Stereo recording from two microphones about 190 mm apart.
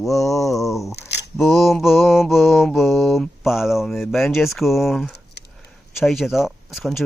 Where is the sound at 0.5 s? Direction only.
Centre (ahead or behind).